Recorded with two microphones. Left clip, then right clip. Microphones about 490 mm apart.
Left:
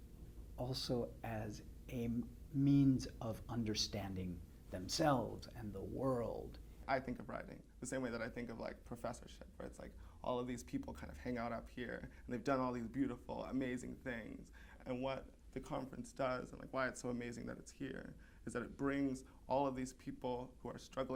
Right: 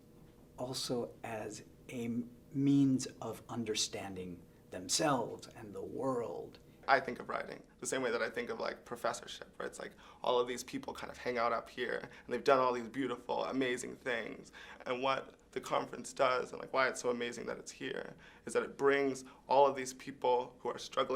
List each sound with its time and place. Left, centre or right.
0.5 s speech: left